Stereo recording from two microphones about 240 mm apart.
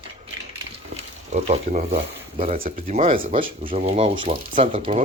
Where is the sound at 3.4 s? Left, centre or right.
Right.